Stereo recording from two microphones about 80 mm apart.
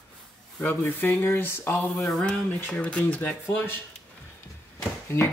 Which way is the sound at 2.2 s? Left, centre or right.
Centre.